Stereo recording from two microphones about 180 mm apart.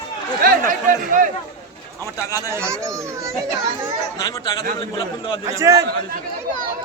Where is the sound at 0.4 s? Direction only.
50° right (ahead or behind).